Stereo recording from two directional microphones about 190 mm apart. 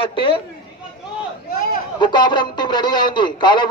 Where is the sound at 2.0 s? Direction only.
25° left (ahead or behind).